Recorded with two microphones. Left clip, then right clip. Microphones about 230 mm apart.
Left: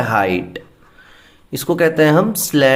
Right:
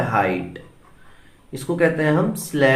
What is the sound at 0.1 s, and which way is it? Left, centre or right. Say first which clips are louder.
Speech: left 4 dB; left.